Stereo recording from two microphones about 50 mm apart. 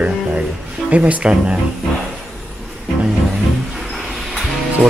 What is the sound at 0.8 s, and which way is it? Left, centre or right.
Speech, right.